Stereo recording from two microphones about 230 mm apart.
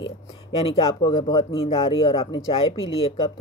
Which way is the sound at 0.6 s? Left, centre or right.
Left.